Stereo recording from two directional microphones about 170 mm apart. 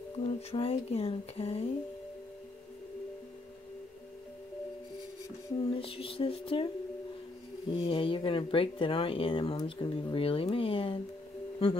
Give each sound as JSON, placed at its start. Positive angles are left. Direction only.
{"t": 0.3, "sound": "speech", "side_deg": 35}
{"t": 5.7, "sound": "speech", "side_deg": 35}
{"t": 7.7, "sound": "speech", "side_deg": 30}